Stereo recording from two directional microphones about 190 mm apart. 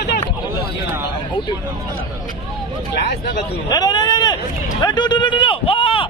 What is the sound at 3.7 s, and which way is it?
Speech, 20° left (ahead or behind).